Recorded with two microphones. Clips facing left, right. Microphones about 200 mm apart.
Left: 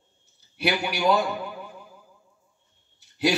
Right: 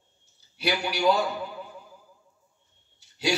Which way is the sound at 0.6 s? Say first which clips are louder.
Left 2 dB; 55° left (ahead or behind).